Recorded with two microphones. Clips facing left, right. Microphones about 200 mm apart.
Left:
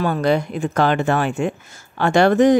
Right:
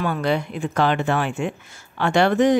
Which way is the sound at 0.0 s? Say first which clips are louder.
Left 4 dB; 40° left (ahead or behind).